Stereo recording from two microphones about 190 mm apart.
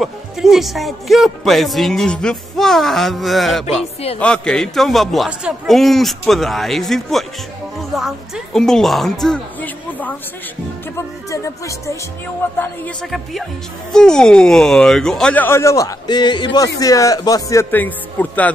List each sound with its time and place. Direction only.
0.0 s speech: centre (ahead or behind)
8.5 s speech: centre (ahead or behind)
11.2 s speech: 15° left (ahead or behind)
12.5 s speech: 5° left (ahead or behind)